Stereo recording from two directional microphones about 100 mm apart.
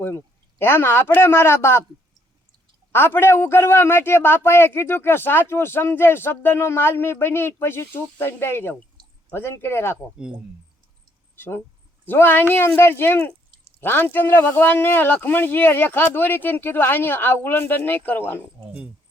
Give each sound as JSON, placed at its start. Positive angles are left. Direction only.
{"t": 0.6, "sound": "a man's voice", "side_deg": 20}
{"t": 2.9, "sound": "a man's voice", "side_deg": 20}
{"t": 11.3, "sound": "a man's voice", "side_deg": 25}